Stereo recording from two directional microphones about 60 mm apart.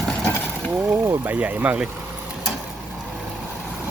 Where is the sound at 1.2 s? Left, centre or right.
Right.